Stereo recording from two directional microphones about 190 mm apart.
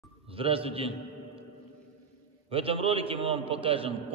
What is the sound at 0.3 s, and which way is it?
A man's voice, 30° right (ahead or behind).